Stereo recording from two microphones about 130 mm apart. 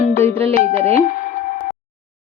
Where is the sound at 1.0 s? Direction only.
90° left.